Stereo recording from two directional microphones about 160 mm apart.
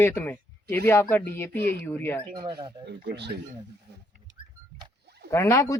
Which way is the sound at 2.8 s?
90° right.